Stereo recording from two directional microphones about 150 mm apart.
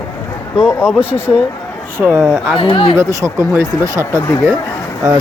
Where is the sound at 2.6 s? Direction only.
35° left (ahead or behind).